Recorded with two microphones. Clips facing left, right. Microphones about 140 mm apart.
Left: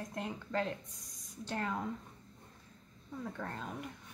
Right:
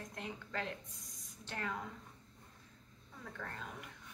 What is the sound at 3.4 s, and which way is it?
Speech, 35° left (ahead or behind).